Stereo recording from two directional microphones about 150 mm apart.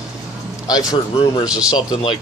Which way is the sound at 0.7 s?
25° left (ahead or behind).